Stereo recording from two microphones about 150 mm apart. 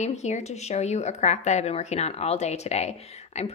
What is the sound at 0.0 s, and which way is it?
A woman's voice, 50° left (ahead or behind).